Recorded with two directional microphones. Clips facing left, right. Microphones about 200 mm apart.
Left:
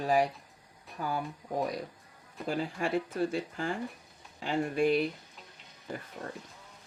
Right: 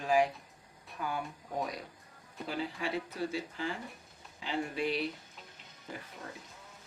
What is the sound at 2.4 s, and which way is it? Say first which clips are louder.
Speech: left 4 dB; 50° left (ahead or behind).